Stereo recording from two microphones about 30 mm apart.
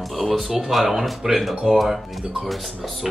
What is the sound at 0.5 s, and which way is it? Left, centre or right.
Speech, centre.